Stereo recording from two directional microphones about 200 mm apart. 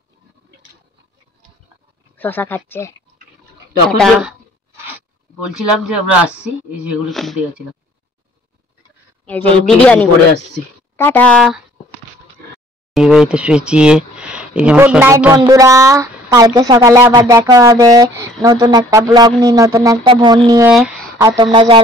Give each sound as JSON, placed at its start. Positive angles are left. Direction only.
{"t": 2.1, "sound": "a man's voice", "side_deg": 10}
{"t": 4.0, "sound": "speech", "side_deg": 0}
{"t": 9.2, "sound": "a man's voice", "side_deg": 5}
{"t": 12.9, "sound": "a woman's voice", "side_deg": 0}